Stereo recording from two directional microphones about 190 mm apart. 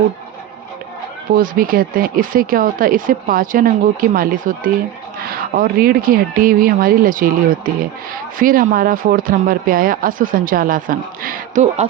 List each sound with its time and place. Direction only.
1.4 s speech: 50° right (ahead or behind)